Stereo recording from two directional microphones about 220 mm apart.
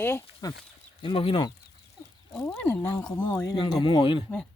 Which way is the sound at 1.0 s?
25° left (ahead or behind).